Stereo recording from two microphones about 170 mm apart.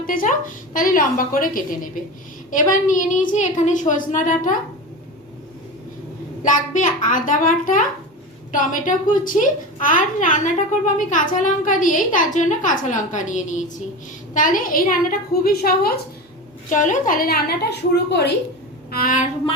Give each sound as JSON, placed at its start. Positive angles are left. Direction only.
{"t": 0.0, "sound": "a child's voice", "side_deg": 55}
{"t": 6.4, "sound": "a child's voice", "side_deg": 50}
{"t": 16.6, "sound": "a woman's voice", "side_deg": 50}
{"t": 18.9, "sound": "a woman's voice", "side_deg": 60}